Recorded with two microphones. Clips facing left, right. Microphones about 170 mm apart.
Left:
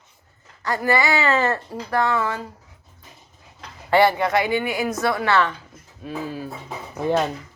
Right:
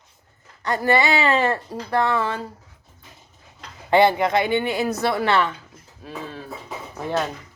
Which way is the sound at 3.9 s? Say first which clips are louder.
Right 1 dB; 20° right (ahead or behind).